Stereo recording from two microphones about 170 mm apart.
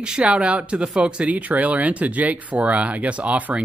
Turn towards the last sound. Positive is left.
turn(degrees=-10)  # may be behind; listen again after turning